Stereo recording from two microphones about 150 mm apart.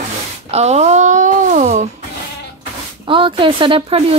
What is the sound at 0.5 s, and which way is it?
Speech, 45° right (ahead or behind).